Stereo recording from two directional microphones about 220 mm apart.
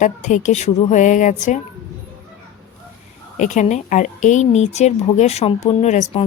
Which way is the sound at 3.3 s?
35° left (ahead or behind).